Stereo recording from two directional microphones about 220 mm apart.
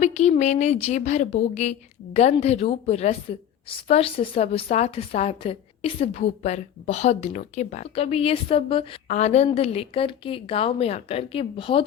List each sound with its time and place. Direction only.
0.0 s a woman's voice: 30° left (ahead or behind)